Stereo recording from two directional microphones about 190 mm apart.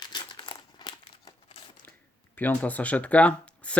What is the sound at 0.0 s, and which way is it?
Crumpling, 25° left (ahead or behind).